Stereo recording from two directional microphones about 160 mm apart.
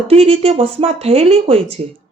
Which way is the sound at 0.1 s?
40° right (ahead or behind).